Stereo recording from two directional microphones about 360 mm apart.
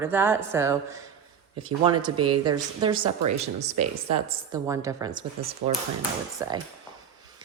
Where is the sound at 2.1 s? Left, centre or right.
Right.